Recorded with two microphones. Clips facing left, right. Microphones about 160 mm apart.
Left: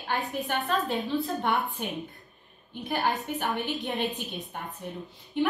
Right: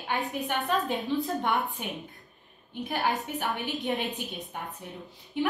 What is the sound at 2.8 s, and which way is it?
A woman's voice, centre (ahead or behind).